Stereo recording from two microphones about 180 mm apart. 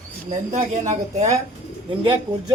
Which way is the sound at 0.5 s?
40° right (ahead or behind).